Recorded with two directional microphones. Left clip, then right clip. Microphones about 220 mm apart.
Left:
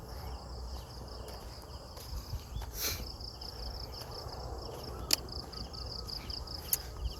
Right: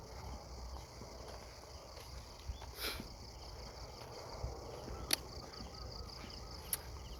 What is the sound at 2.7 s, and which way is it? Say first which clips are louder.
Insect: left 5 dB; 5° right (ahead or behind).